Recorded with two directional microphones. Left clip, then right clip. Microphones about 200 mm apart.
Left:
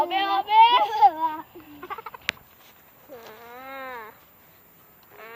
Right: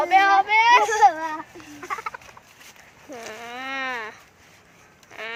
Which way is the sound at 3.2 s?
55° right (ahead or behind).